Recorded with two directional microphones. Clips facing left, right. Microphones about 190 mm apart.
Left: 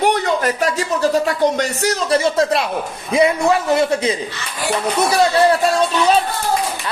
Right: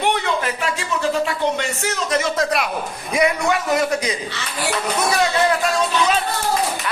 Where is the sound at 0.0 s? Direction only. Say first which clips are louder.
Left 4 dB; 40° left (ahead or behind).